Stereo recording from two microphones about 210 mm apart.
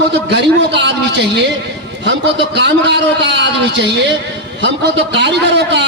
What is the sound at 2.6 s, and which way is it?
A man's voice, 55° right (ahead or behind).